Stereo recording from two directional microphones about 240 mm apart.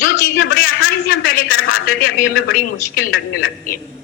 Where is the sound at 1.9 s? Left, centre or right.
Left.